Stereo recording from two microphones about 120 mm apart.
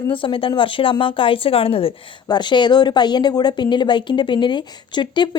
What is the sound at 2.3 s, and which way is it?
Speech, 40° left (ahead or behind).